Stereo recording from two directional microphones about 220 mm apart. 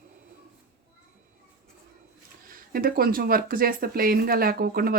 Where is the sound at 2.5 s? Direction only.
40° right (ahead or behind).